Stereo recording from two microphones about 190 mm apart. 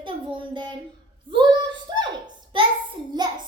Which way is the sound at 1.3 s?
25° right (ahead or behind).